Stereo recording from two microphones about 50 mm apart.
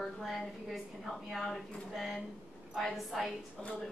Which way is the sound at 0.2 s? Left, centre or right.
Centre.